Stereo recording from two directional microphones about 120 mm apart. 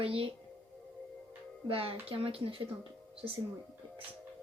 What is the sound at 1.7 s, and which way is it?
Speech, 50° right (ahead or behind).